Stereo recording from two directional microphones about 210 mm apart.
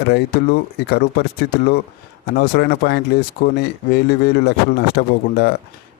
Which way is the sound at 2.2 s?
50° left (ahead or behind).